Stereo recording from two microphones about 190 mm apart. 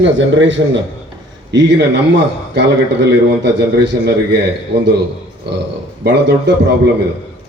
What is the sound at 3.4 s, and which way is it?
Speech, 65° right (ahead or behind).